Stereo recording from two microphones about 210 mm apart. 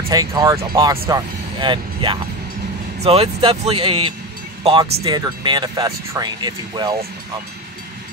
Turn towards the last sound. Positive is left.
turn(degrees=-20)  # may be behind; listen again after turning